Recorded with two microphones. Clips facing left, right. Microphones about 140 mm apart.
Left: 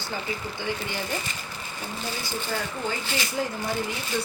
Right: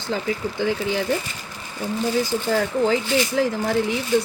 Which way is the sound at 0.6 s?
90° right.